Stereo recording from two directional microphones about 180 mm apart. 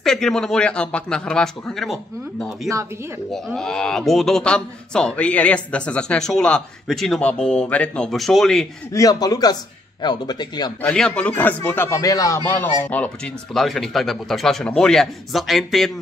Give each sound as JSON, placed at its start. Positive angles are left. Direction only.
{"t": 0.0, "sound": "speech", "side_deg": 0}
{"t": 8.9, "sound": "speech", "side_deg": 20}
{"t": 10.8, "sound": "a man's voice", "side_deg": 5}
{"t": 12.9, "sound": "speech", "side_deg": 5}